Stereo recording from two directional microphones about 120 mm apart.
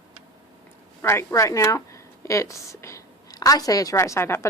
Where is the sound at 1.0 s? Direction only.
20° left (ahead or behind).